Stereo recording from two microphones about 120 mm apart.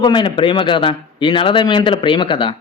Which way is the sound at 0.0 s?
40° left (ahead or behind).